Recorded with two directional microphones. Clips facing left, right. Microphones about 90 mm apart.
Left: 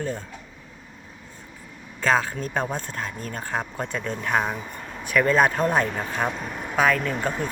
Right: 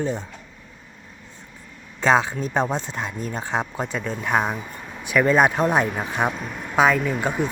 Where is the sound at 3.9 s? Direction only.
5° right (ahead or behind).